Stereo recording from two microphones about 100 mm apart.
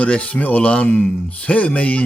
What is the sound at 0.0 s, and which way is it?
Speech, 15° left (ahead or behind).